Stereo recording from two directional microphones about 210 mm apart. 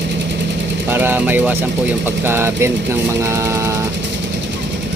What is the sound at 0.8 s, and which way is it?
Speech, 10° right (ahead or behind).